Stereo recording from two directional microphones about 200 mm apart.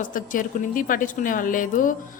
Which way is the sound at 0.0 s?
40° left (ahead or behind).